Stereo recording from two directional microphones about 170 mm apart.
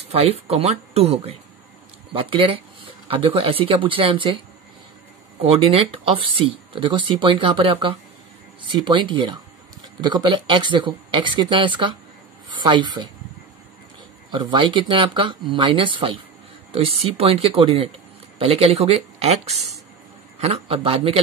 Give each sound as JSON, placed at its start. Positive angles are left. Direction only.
{"t": 0.1, "sound": "speech", "side_deg": -35}
{"t": 5.4, "sound": "a woman's voice", "side_deg": -35}
{"t": 14.3, "sound": "speech", "side_deg": -30}